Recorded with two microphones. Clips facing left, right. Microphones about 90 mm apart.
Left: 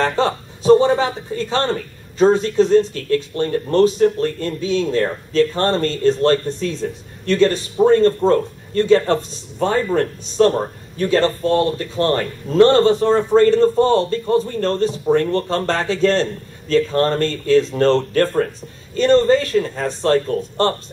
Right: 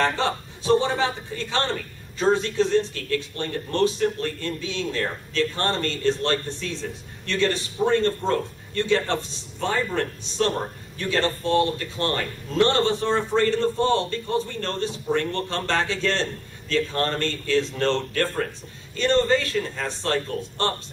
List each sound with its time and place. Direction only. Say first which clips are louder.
0.0 s a woman's voice: left 5 dB; 35° left (ahead or behind)